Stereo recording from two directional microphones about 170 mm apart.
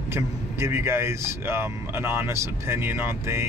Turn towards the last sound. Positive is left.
turn(degrees=-15)  # may be behind; listen again after turning